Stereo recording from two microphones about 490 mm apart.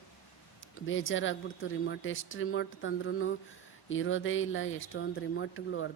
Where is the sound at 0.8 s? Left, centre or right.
Left.